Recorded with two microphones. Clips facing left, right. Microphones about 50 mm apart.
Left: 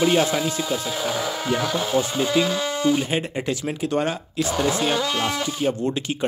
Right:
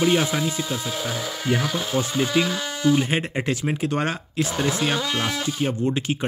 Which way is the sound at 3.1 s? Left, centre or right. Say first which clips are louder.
Even; right.